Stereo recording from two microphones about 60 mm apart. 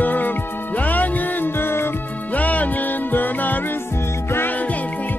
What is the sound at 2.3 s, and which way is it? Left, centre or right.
Music, left.